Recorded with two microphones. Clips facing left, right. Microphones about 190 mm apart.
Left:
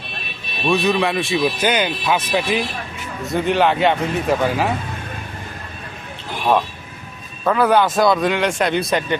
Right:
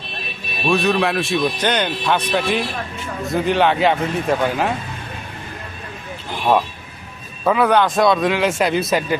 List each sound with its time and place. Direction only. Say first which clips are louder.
0.6 s a man's voice: even; centre (ahead or behind)
7.4 s a man's voice: even; 5° right (ahead or behind)